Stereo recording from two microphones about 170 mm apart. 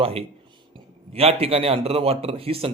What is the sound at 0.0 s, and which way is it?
A man's voice, 35° right (ahead or behind).